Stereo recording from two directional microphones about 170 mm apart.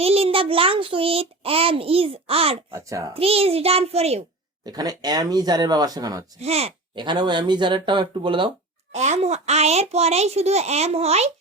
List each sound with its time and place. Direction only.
0.0 s a child's voice: 35° right (ahead or behind)
2.7 s a child's voice: 15° right (ahead or behind)
3.2 s a child's voice: 35° right (ahead or behind)
4.6 s speech: 25° right (ahead or behind)
6.4 s speech: 40° right (ahead or behind)
8.9 s a child's voice: 40° right (ahead or behind)